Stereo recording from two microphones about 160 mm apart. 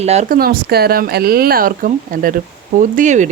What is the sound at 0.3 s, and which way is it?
Speech, 70° right (ahead or behind).